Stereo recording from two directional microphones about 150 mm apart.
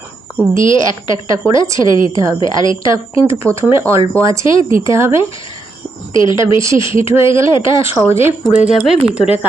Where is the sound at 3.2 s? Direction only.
20° right (ahead or behind).